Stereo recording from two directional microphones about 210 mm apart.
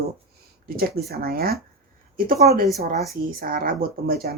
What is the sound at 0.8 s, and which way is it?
Speech, 45° right (ahead or behind).